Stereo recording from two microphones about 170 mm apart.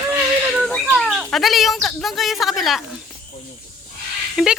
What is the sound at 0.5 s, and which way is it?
Speech, centre (ahead or behind).